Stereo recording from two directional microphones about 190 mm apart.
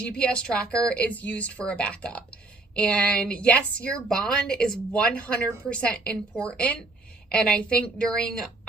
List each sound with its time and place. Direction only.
0.2 s a woman's voice: 5° left (ahead or behind)